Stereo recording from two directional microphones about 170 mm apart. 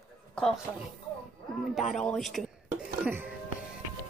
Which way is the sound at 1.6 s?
Centre (ahead or behind).